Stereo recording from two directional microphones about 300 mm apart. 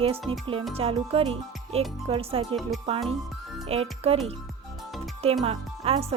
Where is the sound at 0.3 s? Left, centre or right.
Centre.